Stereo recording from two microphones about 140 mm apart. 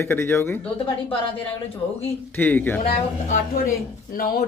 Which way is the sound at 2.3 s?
15° left (ahead or behind).